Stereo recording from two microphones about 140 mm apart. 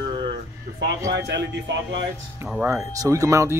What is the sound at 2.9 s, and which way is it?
Speech, 25° right (ahead or behind).